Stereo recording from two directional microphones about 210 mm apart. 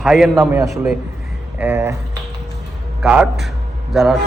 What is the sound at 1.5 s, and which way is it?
Speech, 10° right (ahead or behind).